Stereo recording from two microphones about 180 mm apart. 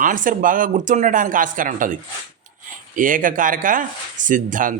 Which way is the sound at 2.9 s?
50° right (ahead or behind).